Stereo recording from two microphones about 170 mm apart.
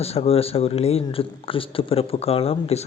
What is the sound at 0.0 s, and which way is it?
Speech, 35° left (ahead or behind).